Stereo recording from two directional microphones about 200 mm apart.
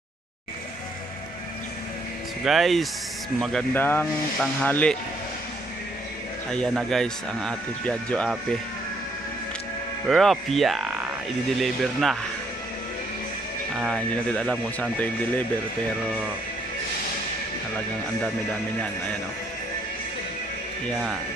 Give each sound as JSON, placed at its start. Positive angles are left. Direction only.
{"t": 2.4, "sound": "speech", "side_deg": 0}
{"t": 3.7, "sound": "speech", "side_deg": 10}
{"t": 6.5, "sound": "speech", "side_deg": 0}
{"t": 10.0, "sound": "speech", "side_deg": 0}
{"t": 13.7, "sound": "speech", "side_deg": 0}